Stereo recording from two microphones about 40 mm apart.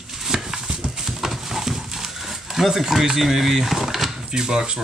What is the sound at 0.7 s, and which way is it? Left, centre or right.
Dog, centre.